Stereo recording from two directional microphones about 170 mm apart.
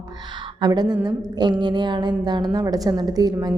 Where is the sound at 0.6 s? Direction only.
25° right (ahead or behind).